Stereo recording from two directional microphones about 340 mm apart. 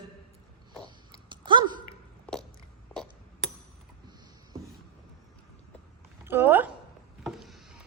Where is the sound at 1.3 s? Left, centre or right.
Centre.